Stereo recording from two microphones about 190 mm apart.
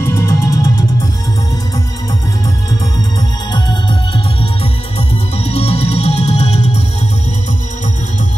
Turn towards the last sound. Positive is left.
turn(degrees=35)  # may be behind; listen again after turning